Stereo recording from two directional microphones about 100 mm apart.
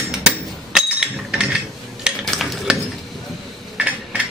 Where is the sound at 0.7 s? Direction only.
10° right (ahead or behind).